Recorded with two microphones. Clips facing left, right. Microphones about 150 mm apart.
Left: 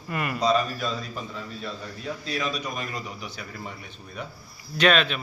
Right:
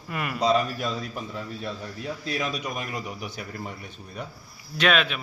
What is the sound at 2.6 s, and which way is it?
Speech, 10° right (ahead or behind).